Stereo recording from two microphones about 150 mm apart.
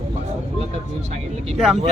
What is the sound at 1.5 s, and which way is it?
Speech, 5° right (ahead or behind).